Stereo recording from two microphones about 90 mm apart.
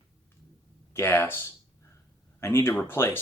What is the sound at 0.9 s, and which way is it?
Speech, 30° left (ahead or behind).